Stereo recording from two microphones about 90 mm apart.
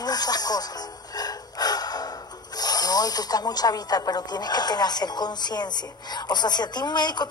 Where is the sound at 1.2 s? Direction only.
45° left (ahead or behind).